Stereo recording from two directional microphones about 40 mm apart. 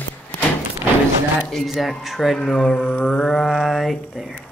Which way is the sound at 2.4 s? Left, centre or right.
Centre.